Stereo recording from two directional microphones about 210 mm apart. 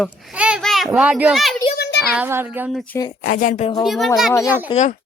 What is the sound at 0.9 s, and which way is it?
A woman's voice, 5° right (ahead or behind).